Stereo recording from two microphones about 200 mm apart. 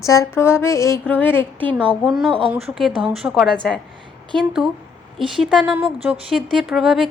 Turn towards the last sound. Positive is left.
turn(degrees=0)  # may be behind; listen again after turning